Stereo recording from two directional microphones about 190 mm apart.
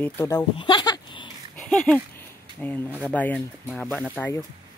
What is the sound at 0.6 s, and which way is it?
Bleat, 25° left (ahead or behind).